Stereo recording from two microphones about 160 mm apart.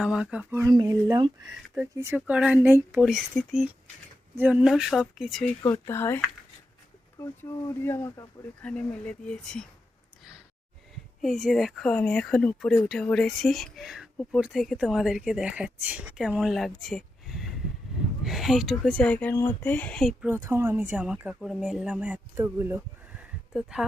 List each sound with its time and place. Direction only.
0.0 s speech: 5° right (ahead or behind)
0.5 s speech: 20° right (ahead or behind)
1.5 s speech: 5° right (ahead or behind)
5.6 s speech: 15° left (ahead or behind)
8.6 s speech: 5° left (ahead or behind)
11.2 s speech: centre (ahead or behind)
20.2 s speech: 15° right (ahead or behind)